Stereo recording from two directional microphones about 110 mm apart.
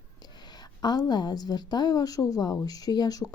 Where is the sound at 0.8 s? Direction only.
40° left (ahead or behind).